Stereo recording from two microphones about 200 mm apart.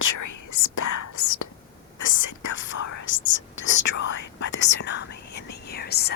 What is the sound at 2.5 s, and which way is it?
Speech, 70° left (ahead or behind).